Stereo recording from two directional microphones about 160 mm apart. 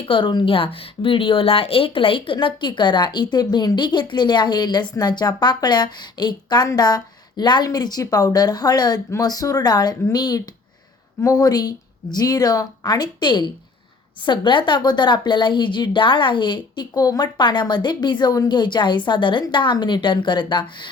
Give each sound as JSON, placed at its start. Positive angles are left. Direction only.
{"t": 0.0, "sound": "a woman's voice", "side_deg": 30}